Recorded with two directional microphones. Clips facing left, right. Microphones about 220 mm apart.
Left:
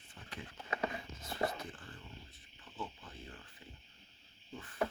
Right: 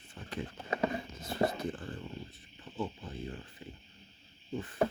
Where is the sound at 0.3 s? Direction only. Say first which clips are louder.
Right 7 dB; 35° right (ahead or behind).